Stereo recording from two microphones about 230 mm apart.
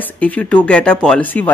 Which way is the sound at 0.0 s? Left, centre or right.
Centre.